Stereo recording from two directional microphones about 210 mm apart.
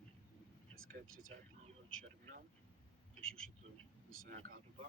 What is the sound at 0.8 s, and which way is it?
Speech, 75° right (ahead or behind).